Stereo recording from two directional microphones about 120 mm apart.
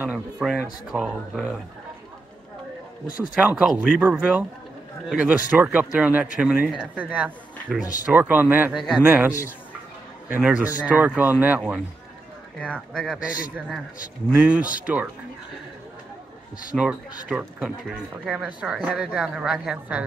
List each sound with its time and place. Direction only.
0.0 s speech: 15° right (ahead or behind)
3.3 s speech: 5° right (ahead or behind)
8.7 s speech: centre (ahead or behind)
9.0 s speech: 15° right (ahead or behind)
10.3 s speech: 10° right (ahead or behind)
12.5 s speech: 10° left (ahead or behind)
14.3 s speech: 10° right (ahead or behind)
16.7 s speech: 10° right (ahead or behind)